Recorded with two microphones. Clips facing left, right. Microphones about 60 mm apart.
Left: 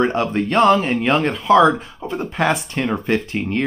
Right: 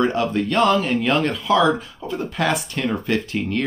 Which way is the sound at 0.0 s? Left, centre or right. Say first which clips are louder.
Left 1 dB; left.